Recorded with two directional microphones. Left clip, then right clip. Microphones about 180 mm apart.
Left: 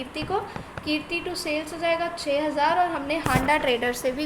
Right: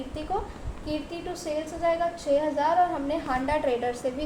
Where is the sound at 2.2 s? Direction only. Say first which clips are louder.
Left 1 dB; 35° left (ahead or behind).